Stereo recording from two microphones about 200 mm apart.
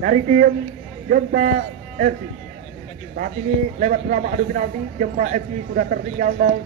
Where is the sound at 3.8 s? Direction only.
40° right (ahead or behind).